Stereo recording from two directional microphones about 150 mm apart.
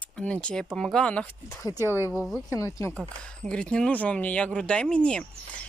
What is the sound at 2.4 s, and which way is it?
Speech, 20° left (ahead or behind).